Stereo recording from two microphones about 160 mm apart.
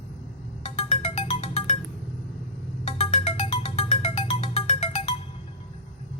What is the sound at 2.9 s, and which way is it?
Music, 40° left (ahead or behind).